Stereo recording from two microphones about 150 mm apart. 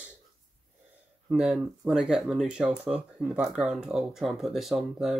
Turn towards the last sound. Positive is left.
turn(degrees=0)  # may be behind; listen again after turning